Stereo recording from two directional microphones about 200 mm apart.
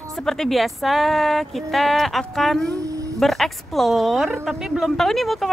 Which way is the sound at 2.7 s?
15° right (ahead or behind).